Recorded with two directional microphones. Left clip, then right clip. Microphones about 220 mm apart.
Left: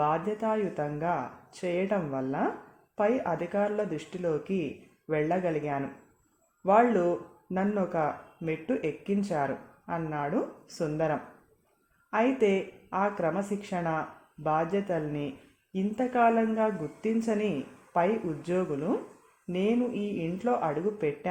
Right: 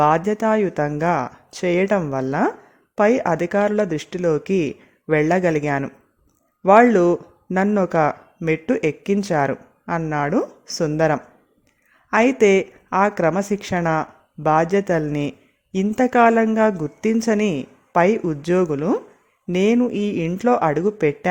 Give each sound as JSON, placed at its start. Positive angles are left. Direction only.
{"t": 0.0, "sound": "speech", "side_deg": -45}